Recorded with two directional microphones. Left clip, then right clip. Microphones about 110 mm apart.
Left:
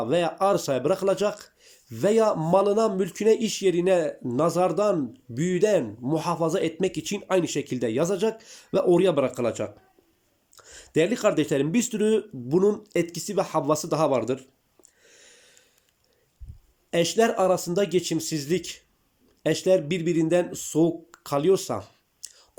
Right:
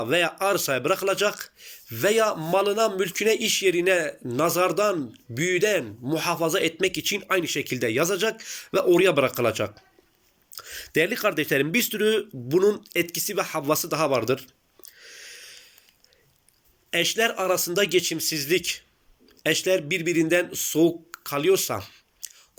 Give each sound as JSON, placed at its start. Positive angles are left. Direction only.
{"t": 0.0, "sound": "speech", "side_deg": 50}
{"t": 16.9, "sound": "speech", "side_deg": 50}